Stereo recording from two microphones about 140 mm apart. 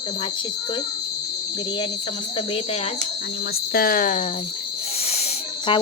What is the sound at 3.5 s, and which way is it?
Speech, 90° left.